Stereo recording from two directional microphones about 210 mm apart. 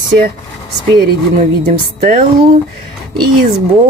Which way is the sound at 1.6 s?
40° right (ahead or behind).